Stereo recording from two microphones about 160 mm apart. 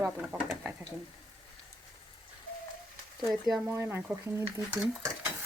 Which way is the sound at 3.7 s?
15° right (ahead or behind).